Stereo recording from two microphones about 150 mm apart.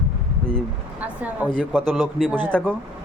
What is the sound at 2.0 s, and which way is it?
Speech, centre (ahead or behind).